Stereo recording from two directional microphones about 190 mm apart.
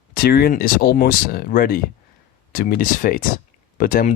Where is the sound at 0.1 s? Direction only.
55° left (ahead or behind).